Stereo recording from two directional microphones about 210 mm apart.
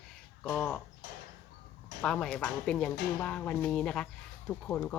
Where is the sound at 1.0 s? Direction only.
45° left (ahead or behind).